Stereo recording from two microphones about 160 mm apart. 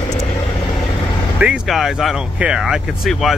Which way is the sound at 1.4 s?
5° right (ahead or behind).